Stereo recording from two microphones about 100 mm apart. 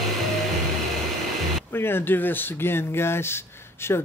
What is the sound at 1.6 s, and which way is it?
Speech, 20° left (ahead or behind).